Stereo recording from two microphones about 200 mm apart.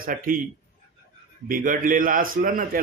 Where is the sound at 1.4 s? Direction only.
45° right (ahead or behind).